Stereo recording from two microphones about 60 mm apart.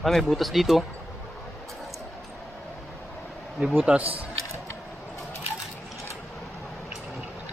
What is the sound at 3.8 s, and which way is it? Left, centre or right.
Speech, right.